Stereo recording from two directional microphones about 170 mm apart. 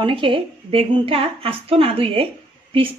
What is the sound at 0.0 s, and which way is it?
A woman's voice, 30° right (ahead or behind).